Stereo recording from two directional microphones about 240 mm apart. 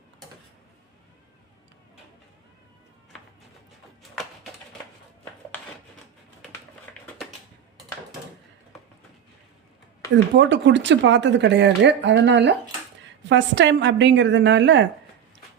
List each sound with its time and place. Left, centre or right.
7.0 s typing: centre
10.3 s speech: right